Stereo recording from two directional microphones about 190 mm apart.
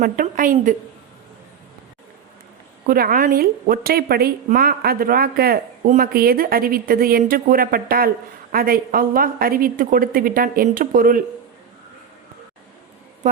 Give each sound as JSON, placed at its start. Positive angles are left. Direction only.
{"t": 0.0, "sound": "a woman's voice", "side_deg": -45}
{"t": 2.8, "sound": "a woman's voice", "side_deg": -50}
{"t": 13.2, "sound": "a woman's voice", "side_deg": -40}